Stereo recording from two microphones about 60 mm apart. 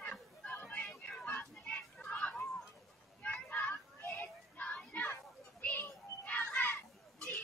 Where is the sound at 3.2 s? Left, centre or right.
Left.